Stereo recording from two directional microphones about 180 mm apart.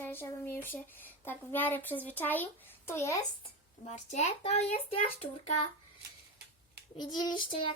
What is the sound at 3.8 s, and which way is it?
A child's voice, 40° left (ahead or behind).